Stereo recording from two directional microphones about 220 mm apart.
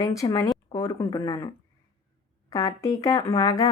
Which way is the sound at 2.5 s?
15° left (ahead or behind).